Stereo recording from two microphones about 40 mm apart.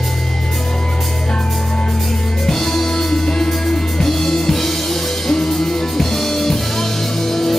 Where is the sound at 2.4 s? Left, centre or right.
Centre.